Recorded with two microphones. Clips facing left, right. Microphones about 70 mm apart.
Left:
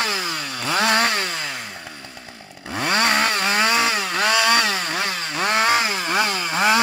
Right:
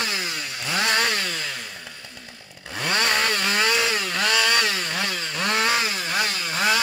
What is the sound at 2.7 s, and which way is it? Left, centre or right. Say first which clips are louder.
Chainsaw: left 4 dB; left.